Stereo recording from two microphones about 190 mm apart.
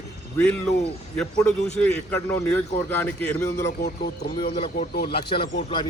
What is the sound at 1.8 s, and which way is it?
Speech, 10° left (ahead or behind).